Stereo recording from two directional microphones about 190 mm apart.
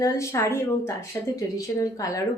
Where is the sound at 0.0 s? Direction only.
15° left (ahead or behind).